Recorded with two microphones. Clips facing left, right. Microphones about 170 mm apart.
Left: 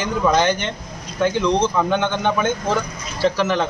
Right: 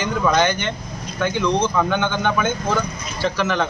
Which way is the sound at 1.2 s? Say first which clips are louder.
Left 2 dB; 30° left (ahead or behind).